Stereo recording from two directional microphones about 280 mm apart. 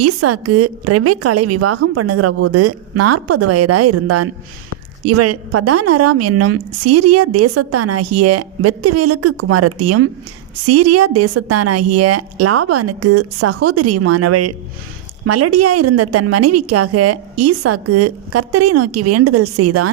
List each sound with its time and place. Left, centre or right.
0.0 s a woman's voice: right